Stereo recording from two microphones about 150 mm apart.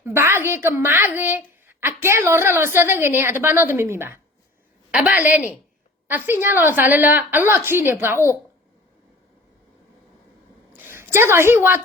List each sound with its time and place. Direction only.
0.0 s a woman's voice: 15° right (ahead or behind)
10.8 s a woman's voice: 15° right (ahead or behind)